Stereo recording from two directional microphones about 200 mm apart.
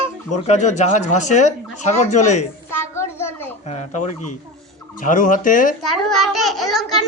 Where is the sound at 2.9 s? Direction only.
15° left (ahead or behind).